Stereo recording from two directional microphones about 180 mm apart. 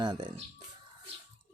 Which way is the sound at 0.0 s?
25° right (ahead or behind).